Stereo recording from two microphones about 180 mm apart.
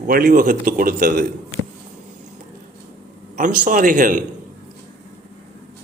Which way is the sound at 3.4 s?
45° right (ahead or behind).